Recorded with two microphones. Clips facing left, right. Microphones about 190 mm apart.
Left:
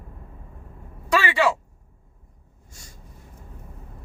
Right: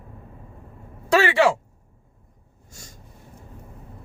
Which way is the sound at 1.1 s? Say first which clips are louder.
Right 3 dB; 50° right (ahead or behind).